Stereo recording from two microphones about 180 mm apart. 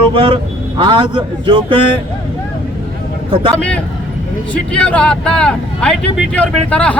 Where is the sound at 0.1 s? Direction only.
30° right (ahead or behind).